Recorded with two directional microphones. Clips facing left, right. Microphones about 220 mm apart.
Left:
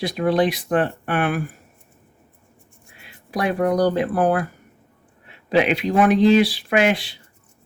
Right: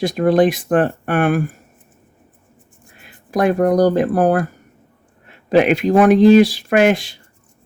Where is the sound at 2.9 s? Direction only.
45° right (ahead or behind).